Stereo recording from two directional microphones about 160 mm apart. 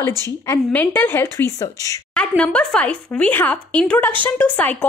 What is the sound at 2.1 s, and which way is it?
Speech, 5° left (ahead or behind).